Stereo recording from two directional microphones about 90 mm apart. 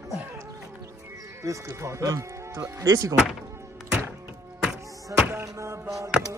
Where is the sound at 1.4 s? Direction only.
35° right (ahead or behind).